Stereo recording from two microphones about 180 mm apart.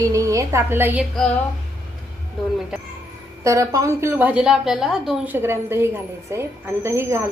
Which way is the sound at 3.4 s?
15° right (ahead or behind).